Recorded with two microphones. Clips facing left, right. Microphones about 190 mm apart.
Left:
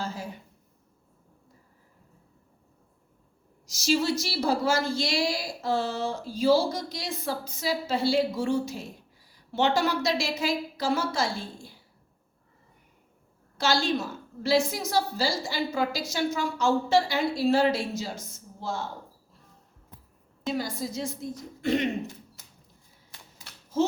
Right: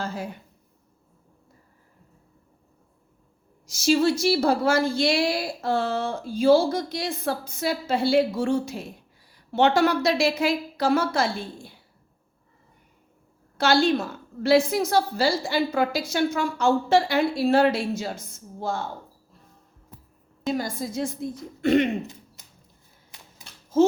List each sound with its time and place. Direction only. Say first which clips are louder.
0.0 s a sound: right 3 dB; 60° right (ahead or behind)
3.7 s a woman's voice: right 5 dB; 55° right (ahead or behind)
13.6 s a woman's voice: right 5 dB; 60° right (ahead or behind)
20.5 s a woman's voice: right 3 dB; 50° right (ahead or behind)